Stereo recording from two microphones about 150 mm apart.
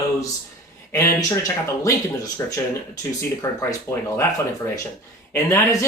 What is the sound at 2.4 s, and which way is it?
Speech, 20° left (ahead or behind).